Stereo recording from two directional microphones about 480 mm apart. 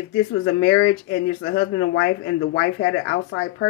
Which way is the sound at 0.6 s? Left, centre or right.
Left.